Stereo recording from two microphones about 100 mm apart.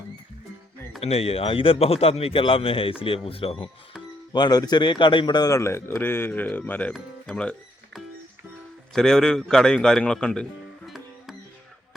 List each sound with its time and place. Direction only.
1.0 s a man's voice: 90° left; by 3.7 s 70° left (ahead or behind)
4.3 s a man's voice: 45° left (ahead or behind)
5.5 s a man's voice: 30° left (ahead or behind); by 7.5 s 10° left (ahead or behind)
8.9 s a man's voice: 5° left (ahead or behind)
10.8 s music: centre (ahead or behind)